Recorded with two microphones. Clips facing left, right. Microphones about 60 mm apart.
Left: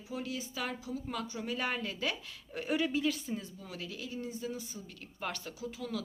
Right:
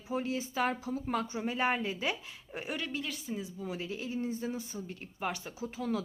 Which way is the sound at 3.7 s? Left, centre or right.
Right.